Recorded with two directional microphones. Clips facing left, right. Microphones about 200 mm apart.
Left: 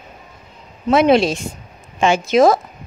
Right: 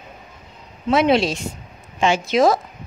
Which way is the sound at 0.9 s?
50° left (ahead or behind).